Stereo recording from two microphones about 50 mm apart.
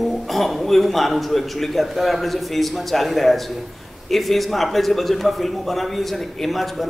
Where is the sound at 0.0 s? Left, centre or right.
Centre.